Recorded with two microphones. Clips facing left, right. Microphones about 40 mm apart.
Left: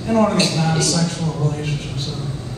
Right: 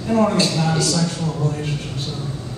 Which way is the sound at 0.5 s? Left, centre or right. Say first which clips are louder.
Left 1 dB; centre.